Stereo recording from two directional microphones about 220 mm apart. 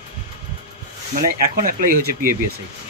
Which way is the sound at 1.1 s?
40° right (ahead or behind).